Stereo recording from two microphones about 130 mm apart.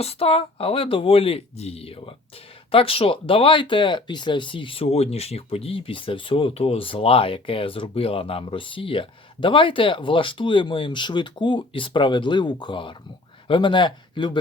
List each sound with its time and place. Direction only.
0.0 s speech: 50° left (ahead or behind)